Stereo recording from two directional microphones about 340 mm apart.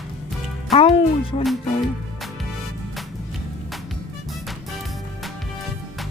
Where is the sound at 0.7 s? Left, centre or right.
Centre.